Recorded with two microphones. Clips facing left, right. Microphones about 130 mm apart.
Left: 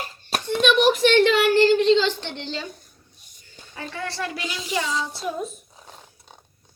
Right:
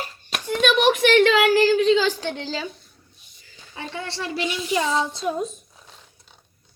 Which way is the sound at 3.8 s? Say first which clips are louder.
Left 1 dB; 25° right (ahead or behind).